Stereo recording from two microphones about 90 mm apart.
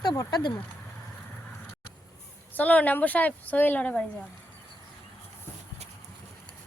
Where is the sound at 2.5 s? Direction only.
15° left (ahead or behind).